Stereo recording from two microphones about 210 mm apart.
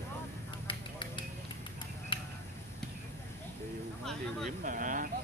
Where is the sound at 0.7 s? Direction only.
25° left (ahead or behind).